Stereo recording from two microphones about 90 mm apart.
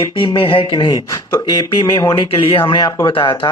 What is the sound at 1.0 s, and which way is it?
Speech, 35° left (ahead or behind).